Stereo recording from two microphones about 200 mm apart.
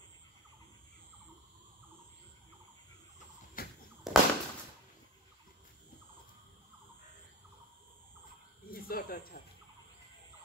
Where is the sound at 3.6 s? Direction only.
45° left (ahead or behind).